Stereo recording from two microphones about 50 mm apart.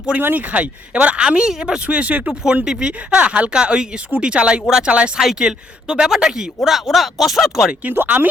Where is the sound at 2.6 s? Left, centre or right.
Centre.